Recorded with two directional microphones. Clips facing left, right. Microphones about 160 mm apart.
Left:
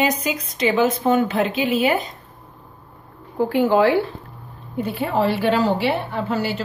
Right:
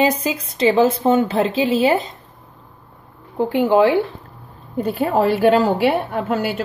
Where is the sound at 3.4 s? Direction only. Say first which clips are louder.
Right 2 dB; 20° right (ahead or behind).